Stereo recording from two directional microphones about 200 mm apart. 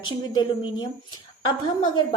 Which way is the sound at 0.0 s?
20° left (ahead or behind).